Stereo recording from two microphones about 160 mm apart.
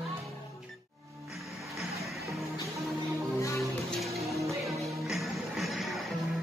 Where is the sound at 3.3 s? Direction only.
20° left (ahead or behind).